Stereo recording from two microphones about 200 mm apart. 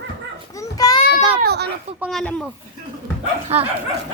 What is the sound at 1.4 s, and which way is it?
Speech, 55° right (ahead or behind).